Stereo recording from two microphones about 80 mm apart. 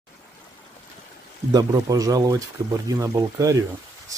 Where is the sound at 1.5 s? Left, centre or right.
Right.